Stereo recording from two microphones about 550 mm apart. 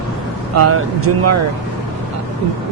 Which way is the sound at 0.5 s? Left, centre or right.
Right.